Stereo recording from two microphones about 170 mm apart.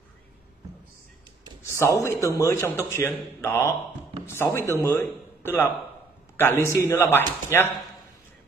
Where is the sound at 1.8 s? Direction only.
15° left (ahead or behind).